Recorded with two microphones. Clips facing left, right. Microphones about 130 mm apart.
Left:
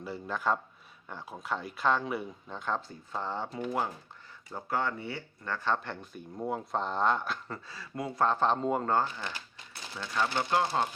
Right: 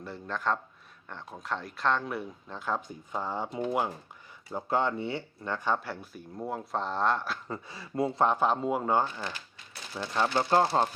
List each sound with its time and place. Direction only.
0.0 s speech: 5° left (ahead or behind)
7.4 s speech: 20° right (ahead or behind)
10.0 s speech: 25° right (ahead or behind)